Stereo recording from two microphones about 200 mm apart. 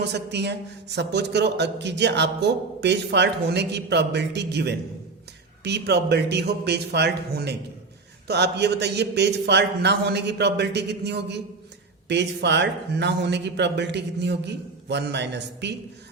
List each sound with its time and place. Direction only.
0.0 s a man's voice: 55° right (ahead or behind)